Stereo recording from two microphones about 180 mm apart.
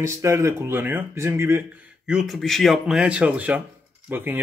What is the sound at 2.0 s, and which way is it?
Speech, centre (ahead or behind).